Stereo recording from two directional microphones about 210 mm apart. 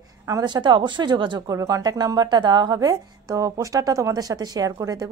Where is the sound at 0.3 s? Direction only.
20° right (ahead or behind).